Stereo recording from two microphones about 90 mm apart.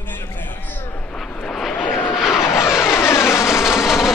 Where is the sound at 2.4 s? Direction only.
30° left (ahead or behind).